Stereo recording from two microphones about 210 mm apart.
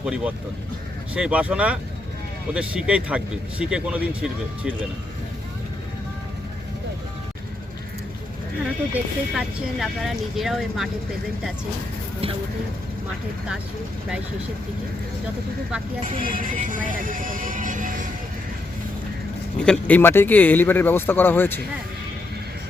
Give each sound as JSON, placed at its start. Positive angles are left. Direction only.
{"t": 0.0, "sound": "speech", "side_deg": -5}
{"t": 8.9, "sound": "speech", "side_deg": -5}
{"t": 16.0, "sound": "speech", "side_deg": -40}
{"t": 19.5, "sound": "speech", "side_deg": 5}